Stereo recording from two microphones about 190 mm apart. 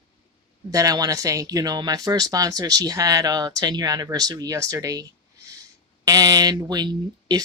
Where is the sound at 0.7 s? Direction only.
20° right (ahead or behind).